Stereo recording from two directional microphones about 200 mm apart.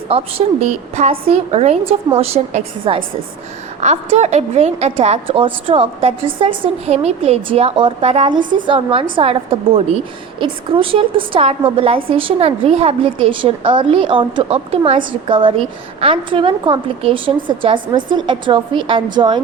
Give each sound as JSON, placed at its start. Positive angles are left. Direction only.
{"t": 0.1, "sound": "a woman's voice", "side_deg": -30}